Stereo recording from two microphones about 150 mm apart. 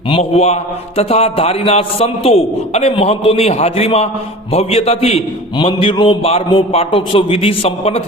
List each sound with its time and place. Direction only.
0.1 s mantra: 45° left (ahead or behind)